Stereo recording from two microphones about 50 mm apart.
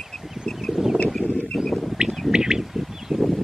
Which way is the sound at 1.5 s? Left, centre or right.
Centre.